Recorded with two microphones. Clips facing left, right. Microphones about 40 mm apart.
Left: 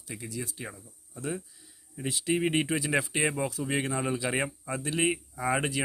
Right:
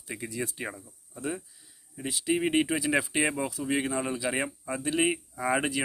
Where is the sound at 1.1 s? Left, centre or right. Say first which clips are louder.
Right 1 dB; centre.